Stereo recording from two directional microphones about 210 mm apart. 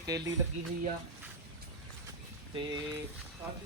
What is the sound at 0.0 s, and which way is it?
Music, 15° right (ahead or behind).